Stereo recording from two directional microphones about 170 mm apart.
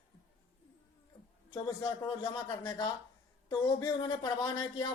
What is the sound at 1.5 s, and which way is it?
Speech, 25° left (ahead or behind).